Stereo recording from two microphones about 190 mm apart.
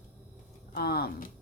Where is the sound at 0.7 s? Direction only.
55° left (ahead or behind).